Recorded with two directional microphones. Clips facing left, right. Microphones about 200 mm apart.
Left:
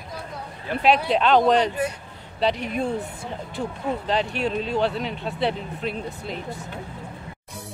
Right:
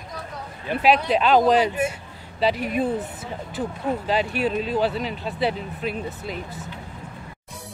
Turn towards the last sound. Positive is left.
turn(degrees=0)  # may be behind; listen again after turning